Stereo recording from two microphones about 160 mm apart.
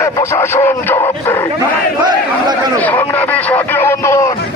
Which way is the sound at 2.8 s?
10° left (ahead or behind).